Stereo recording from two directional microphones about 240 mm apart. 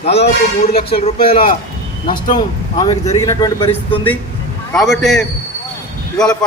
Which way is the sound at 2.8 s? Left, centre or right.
Left.